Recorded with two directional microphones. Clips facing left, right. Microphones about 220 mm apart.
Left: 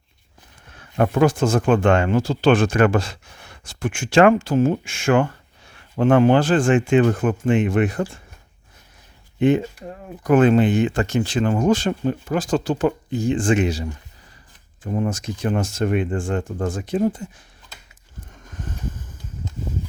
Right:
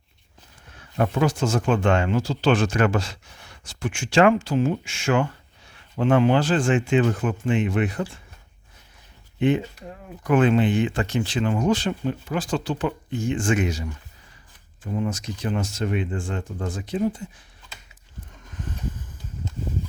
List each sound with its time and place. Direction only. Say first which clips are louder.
0.9 s speech: left 5 dB; 55° left (ahead or behind)
9.4 s speech: left 4 dB; 45° left (ahead or behind)
14.8 s speech: left 3 dB; 50° left (ahead or behind)